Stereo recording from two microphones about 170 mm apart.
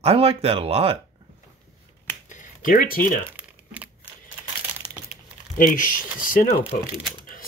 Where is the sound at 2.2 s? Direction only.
50° left (ahead or behind).